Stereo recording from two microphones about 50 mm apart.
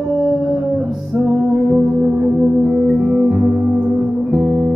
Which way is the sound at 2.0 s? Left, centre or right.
Centre.